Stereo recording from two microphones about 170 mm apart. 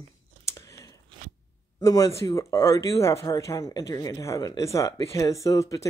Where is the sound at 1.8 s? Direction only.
20° left (ahead or behind).